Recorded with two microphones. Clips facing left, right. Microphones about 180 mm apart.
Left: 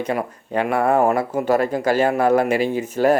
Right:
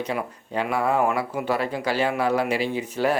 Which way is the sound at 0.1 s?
50° left (ahead or behind).